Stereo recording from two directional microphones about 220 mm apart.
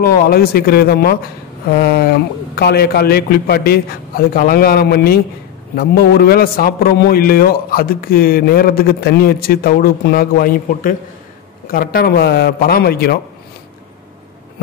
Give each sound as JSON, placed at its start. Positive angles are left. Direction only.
{"t": 0.0, "sound": "a man's voice", "side_deg": 45}